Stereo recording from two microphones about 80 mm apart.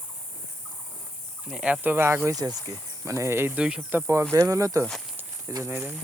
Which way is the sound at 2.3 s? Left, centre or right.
Right.